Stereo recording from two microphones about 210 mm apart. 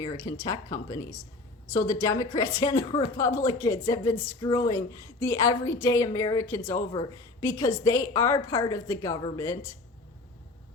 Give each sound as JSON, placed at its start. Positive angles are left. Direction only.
{"t": 0.0, "sound": "a woman's voice", "side_deg": 15}